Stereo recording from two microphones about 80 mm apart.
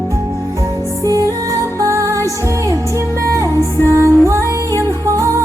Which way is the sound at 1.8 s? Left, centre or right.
Right.